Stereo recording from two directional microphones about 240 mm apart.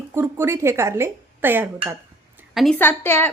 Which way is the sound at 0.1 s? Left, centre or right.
Centre.